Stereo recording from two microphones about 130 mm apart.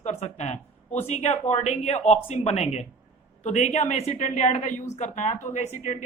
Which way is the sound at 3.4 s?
65° left (ahead or behind).